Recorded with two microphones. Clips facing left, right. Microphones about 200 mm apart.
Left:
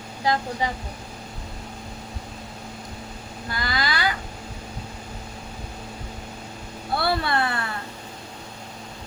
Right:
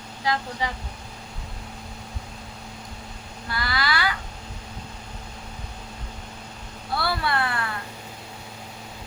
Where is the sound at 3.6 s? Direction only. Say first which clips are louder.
Even; 20° left (ahead or behind).